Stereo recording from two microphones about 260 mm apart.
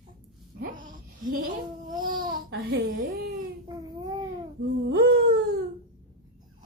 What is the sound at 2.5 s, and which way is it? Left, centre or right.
Speech, right.